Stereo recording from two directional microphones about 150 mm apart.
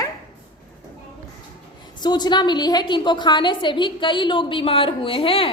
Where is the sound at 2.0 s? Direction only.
30° left (ahead or behind).